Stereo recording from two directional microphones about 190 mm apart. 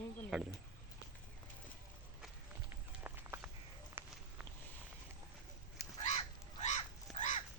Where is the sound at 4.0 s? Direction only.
10° right (ahead or behind).